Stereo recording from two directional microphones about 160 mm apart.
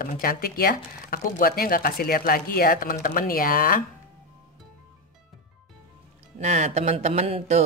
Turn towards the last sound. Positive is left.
turn(degrees=-40)  # may be behind; listen again after turning